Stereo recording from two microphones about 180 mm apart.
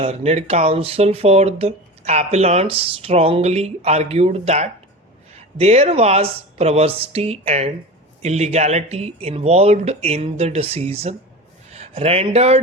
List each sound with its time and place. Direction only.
0.0 s speech: 35° right (ahead or behind)